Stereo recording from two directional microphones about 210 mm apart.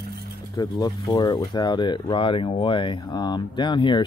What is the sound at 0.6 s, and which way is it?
Speech, 20° left (ahead or behind).